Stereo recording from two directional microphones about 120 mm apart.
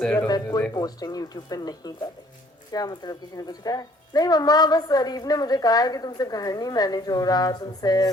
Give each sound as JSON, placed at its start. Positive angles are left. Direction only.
{"t": 0.0, "sound": "speech", "side_deg": 10}
{"t": 0.7, "sound": "a woman's voice", "side_deg": 30}